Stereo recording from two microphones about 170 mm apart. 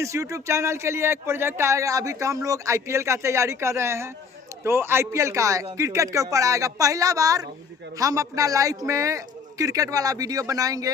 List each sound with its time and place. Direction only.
0.0 s a man's voice: 20° right (ahead or behind)